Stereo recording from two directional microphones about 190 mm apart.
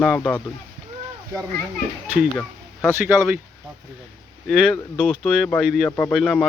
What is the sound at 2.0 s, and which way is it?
Speech, 10° right (ahead or behind).